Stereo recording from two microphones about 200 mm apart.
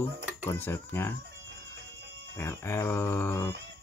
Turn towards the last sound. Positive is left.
turn(degrees=15)  # may be behind; listen again after turning